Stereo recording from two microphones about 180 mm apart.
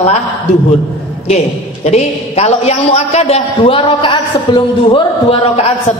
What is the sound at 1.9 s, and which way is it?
A man's voice, 35° left (ahead or behind).